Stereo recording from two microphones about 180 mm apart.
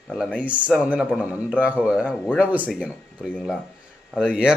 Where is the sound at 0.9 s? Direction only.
5° right (ahead or behind).